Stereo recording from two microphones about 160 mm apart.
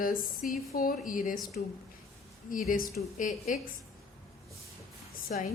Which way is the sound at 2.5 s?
60° left (ahead or behind).